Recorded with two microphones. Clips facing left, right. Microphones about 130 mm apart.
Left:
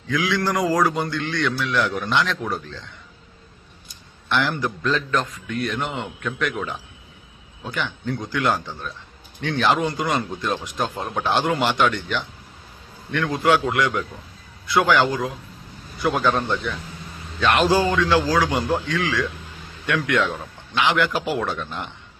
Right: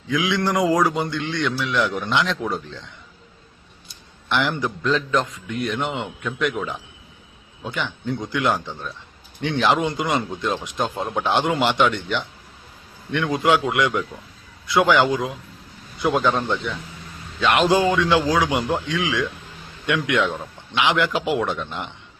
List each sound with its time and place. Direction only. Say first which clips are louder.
0.1 s speech: right 1 dB; 20° right (ahead or behind)
4.3 s a man's voice: even; 15° right (ahead or behind)
7.6 s a man's voice: even; 20° right (ahead or behind)